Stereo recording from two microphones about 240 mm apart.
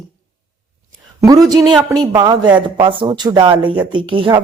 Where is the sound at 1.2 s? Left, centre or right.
Centre.